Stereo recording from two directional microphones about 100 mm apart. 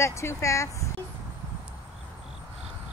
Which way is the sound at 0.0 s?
25° left (ahead or behind).